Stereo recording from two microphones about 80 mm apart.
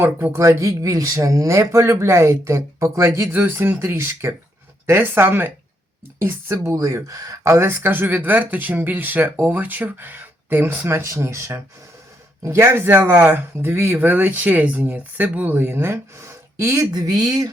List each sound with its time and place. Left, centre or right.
0.0 s speech: right
0.3 s speech: right
6.7 s speech: right
7.4 s speech: right
16.9 s speech: right